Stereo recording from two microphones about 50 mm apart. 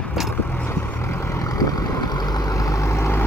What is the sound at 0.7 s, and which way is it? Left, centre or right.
Vehicle, left.